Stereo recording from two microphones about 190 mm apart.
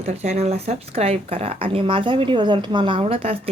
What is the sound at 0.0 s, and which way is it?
Speech, 35° right (ahead or behind).